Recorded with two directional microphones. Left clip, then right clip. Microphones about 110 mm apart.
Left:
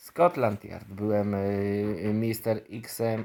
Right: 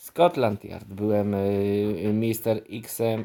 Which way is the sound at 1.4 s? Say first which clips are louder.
Right 4 dB; 70° right (ahead or behind).